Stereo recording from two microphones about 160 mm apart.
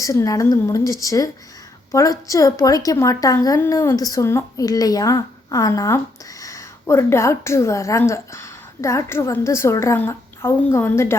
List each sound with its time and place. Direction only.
0.0 s a woman's voice: 20° left (ahead or behind)